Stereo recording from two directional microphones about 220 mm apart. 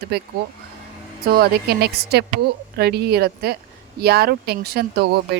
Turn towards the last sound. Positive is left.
turn(degrees=-45)  # may be behind; listen again after turning